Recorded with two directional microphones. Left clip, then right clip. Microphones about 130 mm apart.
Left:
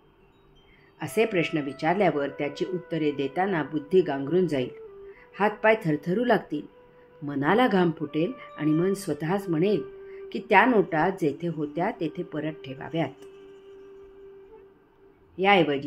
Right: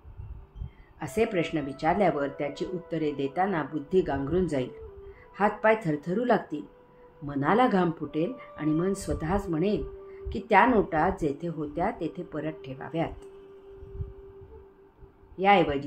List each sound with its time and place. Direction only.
0.9 s speech: 65° left (ahead or behind)
15.3 s speech: 65° left (ahead or behind)